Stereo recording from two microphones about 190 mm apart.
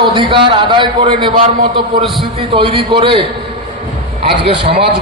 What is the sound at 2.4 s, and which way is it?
Speech, 30° right (ahead or behind).